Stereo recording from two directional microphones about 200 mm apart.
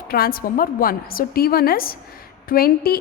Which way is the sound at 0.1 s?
50° left (ahead or behind).